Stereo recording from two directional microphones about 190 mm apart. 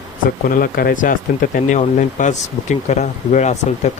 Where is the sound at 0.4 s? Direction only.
50° left (ahead or behind).